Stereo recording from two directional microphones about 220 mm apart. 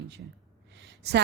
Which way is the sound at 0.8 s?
50° right (ahead or behind).